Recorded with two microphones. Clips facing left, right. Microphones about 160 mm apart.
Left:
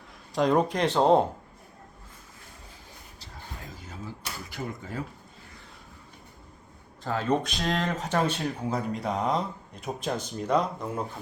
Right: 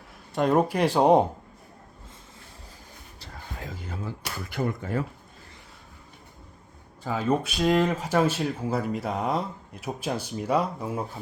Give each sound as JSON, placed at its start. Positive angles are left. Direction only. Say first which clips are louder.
{"t": 0.3, "sound": "speech", "louder": "right 1 dB", "side_deg": -5}
{"t": 3.8, "sound": "a sound", "louder": "right 3 dB", "side_deg": -65}
{"t": 7.0, "sound": "speech", "louder": "right 1 dB", "side_deg": -5}